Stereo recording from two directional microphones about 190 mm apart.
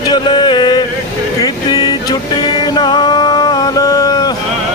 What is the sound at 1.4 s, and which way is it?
Vehicle, 20° left (ahead or behind).